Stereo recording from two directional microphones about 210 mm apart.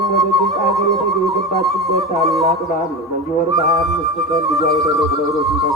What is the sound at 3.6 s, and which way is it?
Music, centre (ahead or behind).